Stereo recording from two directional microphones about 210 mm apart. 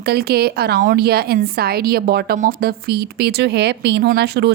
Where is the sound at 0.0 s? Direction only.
50° right (ahead or behind).